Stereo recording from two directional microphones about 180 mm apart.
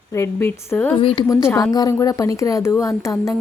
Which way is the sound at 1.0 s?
30° left (ahead or behind).